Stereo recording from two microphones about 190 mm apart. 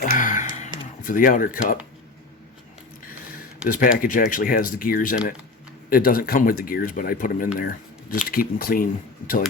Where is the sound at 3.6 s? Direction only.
45° left (ahead or behind).